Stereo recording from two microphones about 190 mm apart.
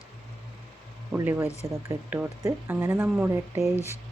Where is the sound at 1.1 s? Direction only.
10° right (ahead or behind).